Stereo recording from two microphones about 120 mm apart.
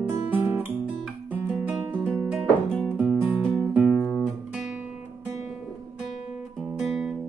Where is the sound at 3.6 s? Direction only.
5° right (ahead or behind).